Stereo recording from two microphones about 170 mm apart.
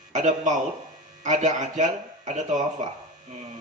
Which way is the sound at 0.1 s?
45° right (ahead or behind).